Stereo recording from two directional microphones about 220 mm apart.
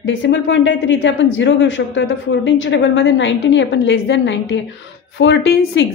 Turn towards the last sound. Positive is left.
turn(degrees=55)  # may be behind; listen again after turning